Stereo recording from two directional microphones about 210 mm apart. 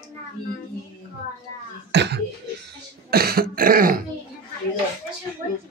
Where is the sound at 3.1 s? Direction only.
45° right (ahead or behind).